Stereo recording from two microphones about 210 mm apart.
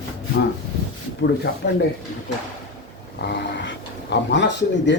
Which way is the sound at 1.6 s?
50° left (ahead or behind).